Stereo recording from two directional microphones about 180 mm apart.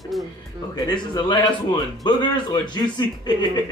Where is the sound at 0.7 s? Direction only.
25° left (ahead or behind).